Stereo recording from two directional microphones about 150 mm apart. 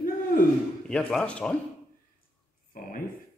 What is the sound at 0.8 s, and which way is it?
Speech, 5° left (ahead or behind).